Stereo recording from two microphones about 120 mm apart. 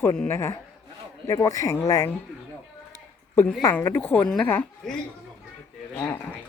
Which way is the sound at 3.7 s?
15° left (ahead or behind).